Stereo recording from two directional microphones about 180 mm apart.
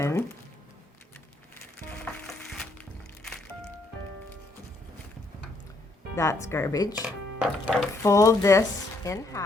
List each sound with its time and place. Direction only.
0.0 s music: 15° left (ahead or behind)
1.8 s music: 5° left (ahead or behind)
6.1 s speech: 15° left (ahead or behind)
7.0 s speech: 10° right (ahead or behind)
8.0 s speech: 15° left (ahead or behind)